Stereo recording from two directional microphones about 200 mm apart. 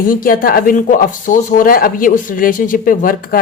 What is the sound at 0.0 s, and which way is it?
Speech, 45° left (ahead or behind).